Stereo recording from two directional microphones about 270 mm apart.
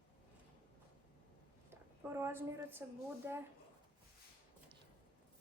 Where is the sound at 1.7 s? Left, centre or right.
Centre.